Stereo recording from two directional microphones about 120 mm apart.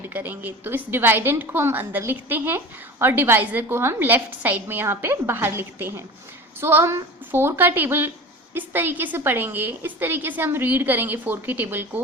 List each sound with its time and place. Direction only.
0.0 s a woman's voice: 15° right (ahead or behind)